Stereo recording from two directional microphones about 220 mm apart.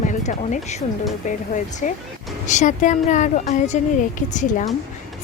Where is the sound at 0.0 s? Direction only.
35° left (ahead or behind).